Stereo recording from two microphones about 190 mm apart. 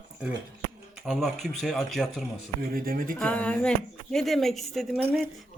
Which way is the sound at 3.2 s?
5° left (ahead or behind).